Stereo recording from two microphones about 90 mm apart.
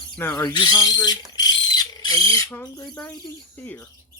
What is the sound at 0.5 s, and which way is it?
Bird, 55° left (ahead or behind).